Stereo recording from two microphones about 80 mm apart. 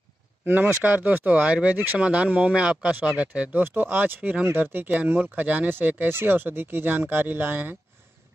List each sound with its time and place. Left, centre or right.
0.5 s speech: right